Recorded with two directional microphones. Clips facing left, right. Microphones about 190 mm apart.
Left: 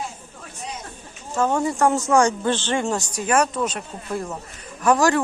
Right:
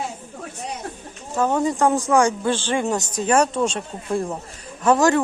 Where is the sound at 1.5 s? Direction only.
15° right (ahead or behind).